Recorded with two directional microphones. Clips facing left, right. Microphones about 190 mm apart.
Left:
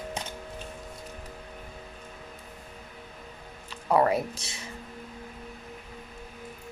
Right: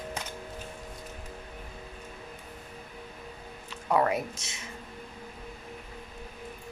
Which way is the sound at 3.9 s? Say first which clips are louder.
Left 3 dB; 35° left (ahead or behind).